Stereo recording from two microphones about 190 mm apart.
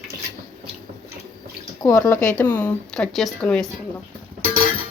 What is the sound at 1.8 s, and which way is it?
Speech, 15° left (ahead or behind).